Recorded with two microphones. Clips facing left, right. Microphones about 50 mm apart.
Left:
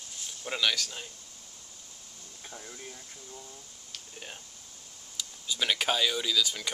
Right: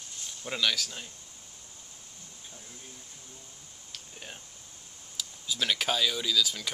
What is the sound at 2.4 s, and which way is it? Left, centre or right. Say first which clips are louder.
Speech: left 7 dB; left.